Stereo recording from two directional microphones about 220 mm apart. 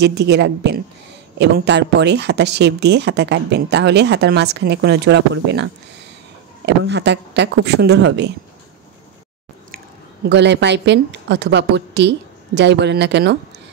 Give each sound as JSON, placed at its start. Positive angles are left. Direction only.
{"t": 0.0, "sound": "speech", "side_deg": -50}
{"t": 10.2, "sound": "speech", "side_deg": -50}